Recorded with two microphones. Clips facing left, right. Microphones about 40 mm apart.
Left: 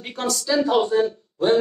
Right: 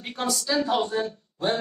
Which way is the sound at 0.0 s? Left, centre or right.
Centre.